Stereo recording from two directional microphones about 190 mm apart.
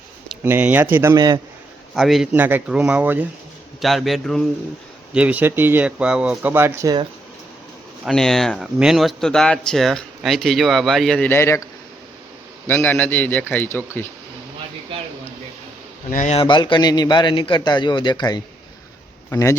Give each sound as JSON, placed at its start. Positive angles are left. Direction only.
{"t": 0.3, "sound": "speech", "side_deg": -10}
{"t": 2.0, "sound": "speech", "side_deg": 0}
{"t": 8.0, "sound": "speech", "side_deg": 0}
{"t": 12.6, "sound": "a man's voice", "side_deg": 10}
{"t": 16.1, "sound": "a man's voice", "side_deg": 35}